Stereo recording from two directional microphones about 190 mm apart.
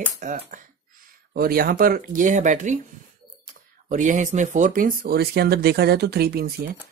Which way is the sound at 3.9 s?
40° right (ahead or behind).